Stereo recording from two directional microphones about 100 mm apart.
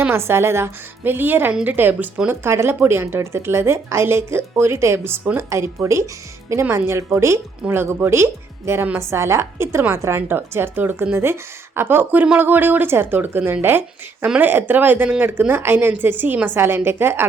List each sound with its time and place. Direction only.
0.0 s speech: 25° right (ahead or behind)